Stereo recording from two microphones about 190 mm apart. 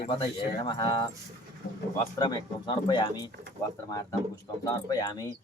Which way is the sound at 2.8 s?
25° left (ahead or behind).